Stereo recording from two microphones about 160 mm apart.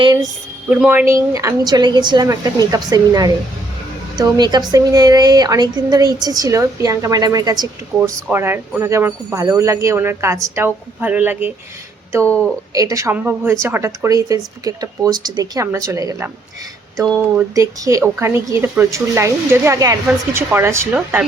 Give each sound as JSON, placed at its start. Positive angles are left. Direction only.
{"t": 0.0, "sound": "speech", "side_deg": -25}
{"t": 0.7, "sound": "a woman's voice", "side_deg": -10}
{"t": 8.3, "sound": "a woman's voice", "side_deg": -15}
{"t": 17.3, "sound": "speech", "side_deg": -20}